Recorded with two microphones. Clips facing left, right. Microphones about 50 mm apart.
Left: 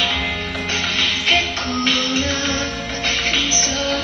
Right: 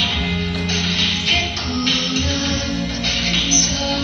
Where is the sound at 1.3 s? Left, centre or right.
Left.